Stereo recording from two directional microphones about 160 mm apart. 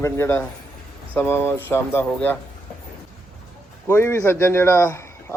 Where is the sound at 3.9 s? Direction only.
15° left (ahead or behind).